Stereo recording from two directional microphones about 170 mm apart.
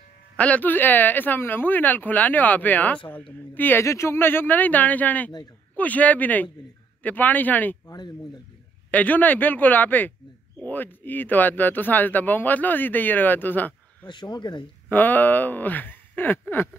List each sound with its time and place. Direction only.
0.4 s speech: 10° left (ahead or behind)
8.9 s speech: 10° left (ahead or behind)
14.0 s speech: 25° left (ahead or behind)
14.9 s speech: 10° left (ahead or behind)